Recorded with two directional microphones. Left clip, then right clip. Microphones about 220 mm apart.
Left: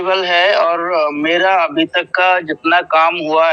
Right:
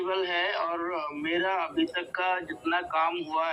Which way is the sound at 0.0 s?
40° left (ahead or behind).